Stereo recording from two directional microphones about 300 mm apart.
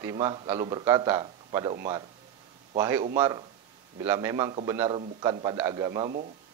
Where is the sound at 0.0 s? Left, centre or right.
Centre.